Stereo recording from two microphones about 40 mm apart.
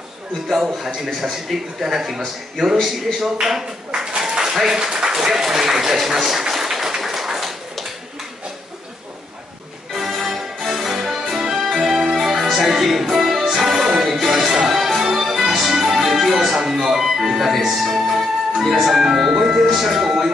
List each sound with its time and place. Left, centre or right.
0.7 s a man's voice: centre
4.2 s a sound: centre
9.9 s music: centre
19.3 s speech: centre
19.8 s a man's voice: centre